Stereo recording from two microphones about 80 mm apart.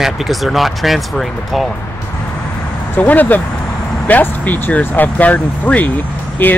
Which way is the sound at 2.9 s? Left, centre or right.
Left.